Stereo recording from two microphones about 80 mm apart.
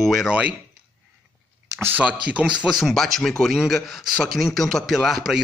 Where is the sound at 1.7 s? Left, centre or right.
Right.